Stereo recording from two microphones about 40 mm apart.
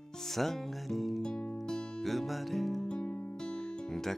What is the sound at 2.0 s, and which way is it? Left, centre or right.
Music, centre.